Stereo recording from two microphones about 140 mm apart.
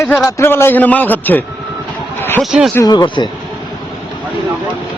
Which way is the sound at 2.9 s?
30° left (ahead or behind).